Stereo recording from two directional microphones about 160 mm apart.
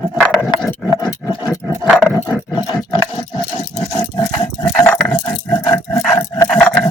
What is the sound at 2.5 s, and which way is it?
Roaring cats, 30° left (ahead or behind).